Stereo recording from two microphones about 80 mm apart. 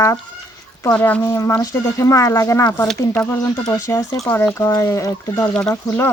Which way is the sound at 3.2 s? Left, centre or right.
Left.